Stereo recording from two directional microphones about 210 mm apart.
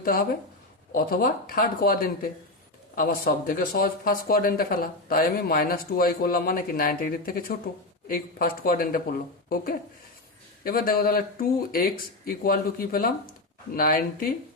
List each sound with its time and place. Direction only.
0.0 s speech: 45° left (ahead or behind)
10.6 s speech: 45° left (ahead or behind)